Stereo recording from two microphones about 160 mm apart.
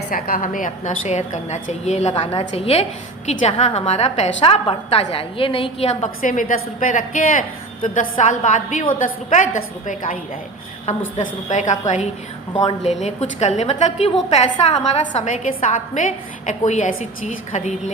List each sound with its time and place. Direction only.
0.1 s a woman's voice: 65° left (ahead or behind); by 17.9 s 45° left (ahead or behind)